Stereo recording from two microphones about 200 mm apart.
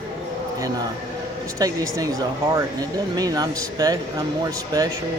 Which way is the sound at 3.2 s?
20° right (ahead or behind).